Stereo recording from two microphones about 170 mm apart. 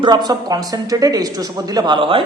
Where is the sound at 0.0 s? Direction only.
25° right (ahead or behind).